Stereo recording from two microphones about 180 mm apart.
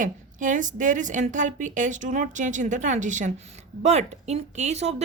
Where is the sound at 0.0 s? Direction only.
45° right (ahead or behind).